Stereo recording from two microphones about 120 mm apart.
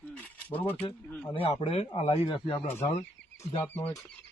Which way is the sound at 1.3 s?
55° left (ahead or behind).